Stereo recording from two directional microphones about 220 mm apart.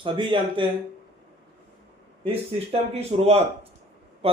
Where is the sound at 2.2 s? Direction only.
25° right (ahead or behind).